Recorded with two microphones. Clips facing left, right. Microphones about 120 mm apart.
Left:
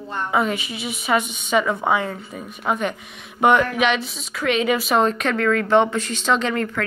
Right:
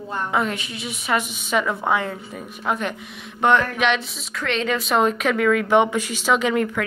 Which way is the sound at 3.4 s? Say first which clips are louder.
Left 2 dB; 10° left (ahead or behind).